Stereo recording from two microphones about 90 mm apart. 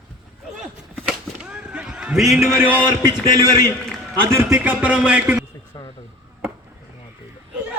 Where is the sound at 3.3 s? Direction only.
45° right (ahead or behind).